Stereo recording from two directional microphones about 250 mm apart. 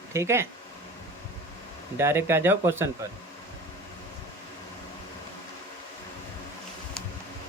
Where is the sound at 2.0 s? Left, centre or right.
Centre.